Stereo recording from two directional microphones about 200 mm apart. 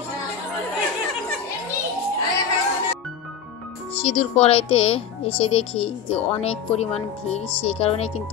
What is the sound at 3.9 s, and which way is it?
Speech, 30° left (ahead or behind).